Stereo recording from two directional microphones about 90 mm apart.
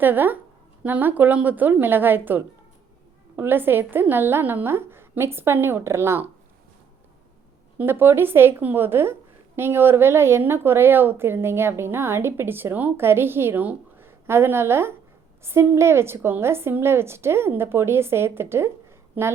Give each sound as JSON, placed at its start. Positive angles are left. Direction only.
{"t": 0.0, "sound": "a woman's voice", "side_deg": -20}
{"t": 7.8, "sound": "a woman's voice", "side_deg": -25}